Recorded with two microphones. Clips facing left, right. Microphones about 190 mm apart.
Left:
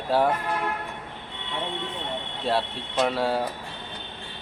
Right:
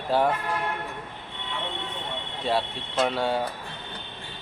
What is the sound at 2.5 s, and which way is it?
Speech, centre (ahead or behind).